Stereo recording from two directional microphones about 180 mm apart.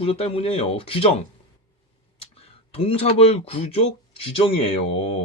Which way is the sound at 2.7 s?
35° left (ahead or behind).